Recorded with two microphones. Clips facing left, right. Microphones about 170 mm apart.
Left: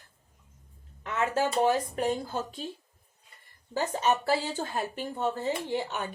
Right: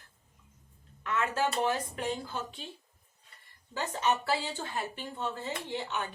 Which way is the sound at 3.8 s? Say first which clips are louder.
Left 3 dB; 45° left (ahead or behind).